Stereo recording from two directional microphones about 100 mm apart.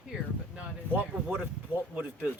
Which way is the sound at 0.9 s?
20° right (ahead or behind).